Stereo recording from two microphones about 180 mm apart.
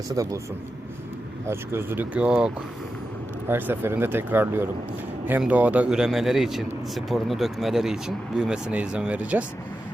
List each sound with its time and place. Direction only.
0.1 s speech: 20° right (ahead or behind)
1.5 s speech: 10° right (ahead or behind)
3.5 s speech: 10° right (ahead or behind)